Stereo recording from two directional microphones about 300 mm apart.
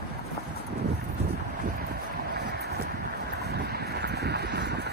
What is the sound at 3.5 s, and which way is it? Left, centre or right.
Boat, right.